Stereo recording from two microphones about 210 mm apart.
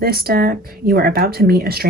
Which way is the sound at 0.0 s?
45° right (ahead or behind).